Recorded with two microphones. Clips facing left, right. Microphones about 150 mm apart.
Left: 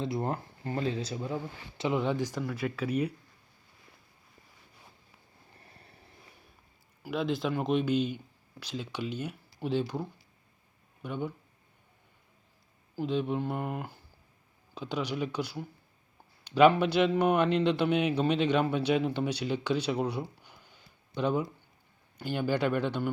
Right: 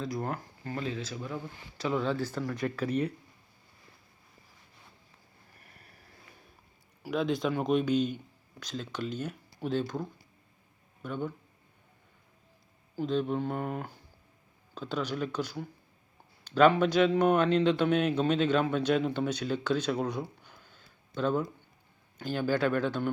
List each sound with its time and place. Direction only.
0.0 s a man's voice: 25° left (ahead or behind)
2.4 s speech: 5° left (ahead or behind)
5.5 s a sound: 25° left (ahead or behind)
7.0 s a man's voice: centre (ahead or behind)
13.0 s a man's voice: 10° left (ahead or behind)